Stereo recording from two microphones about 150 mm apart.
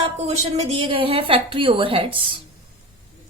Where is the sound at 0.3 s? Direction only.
40° right (ahead or behind).